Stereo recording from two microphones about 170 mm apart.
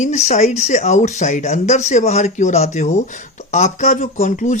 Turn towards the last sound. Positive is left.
turn(degrees=45)  # may be behind; listen again after turning